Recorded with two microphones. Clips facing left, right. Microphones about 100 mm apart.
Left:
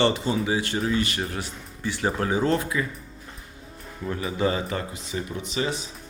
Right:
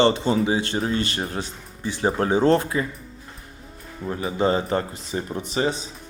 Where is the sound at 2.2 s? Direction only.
30° right (ahead or behind).